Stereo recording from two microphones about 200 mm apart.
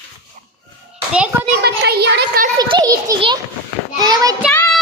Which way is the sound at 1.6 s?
55° right (ahead or behind).